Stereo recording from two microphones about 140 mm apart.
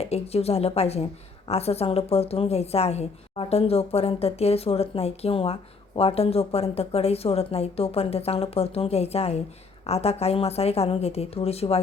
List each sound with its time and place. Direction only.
0.0 s speech: 45° left (ahead or behind)